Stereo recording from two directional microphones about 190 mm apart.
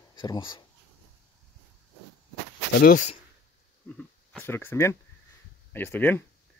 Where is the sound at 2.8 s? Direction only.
45° left (ahead or behind).